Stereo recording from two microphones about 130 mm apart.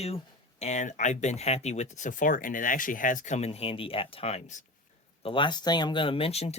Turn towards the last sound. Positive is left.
turn(degrees=55)  # may be behind; listen again after turning